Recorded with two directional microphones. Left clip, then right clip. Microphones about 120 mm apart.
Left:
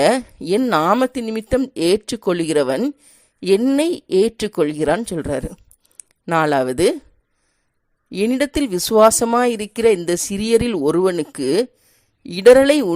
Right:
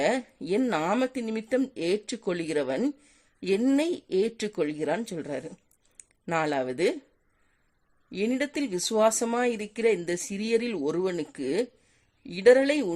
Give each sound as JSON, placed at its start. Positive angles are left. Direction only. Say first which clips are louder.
{"t": 0.0, "sound": "speech", "louder": "left 10 dB", "side_deg": 45}
{"t": 8.1, "sound": "speech", "louder": "left 10 dB", "side_deg": 45}